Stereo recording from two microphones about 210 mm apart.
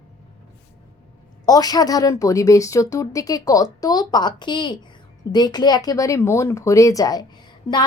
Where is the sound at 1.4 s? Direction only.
20° left (ahead or behind).